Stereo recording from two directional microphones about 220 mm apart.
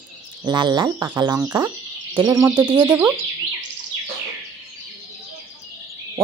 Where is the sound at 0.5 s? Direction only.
20° right (ahead or behind).